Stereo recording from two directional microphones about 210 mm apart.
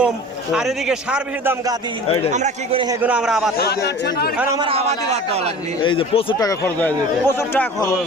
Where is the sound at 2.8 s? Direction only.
15° right (ahead or behind).